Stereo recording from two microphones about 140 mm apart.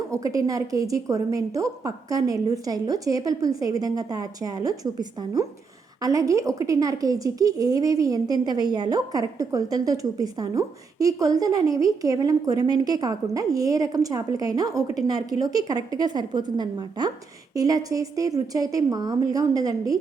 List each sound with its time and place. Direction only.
0.1 s a woman's voice: 25° right (ahead or behind)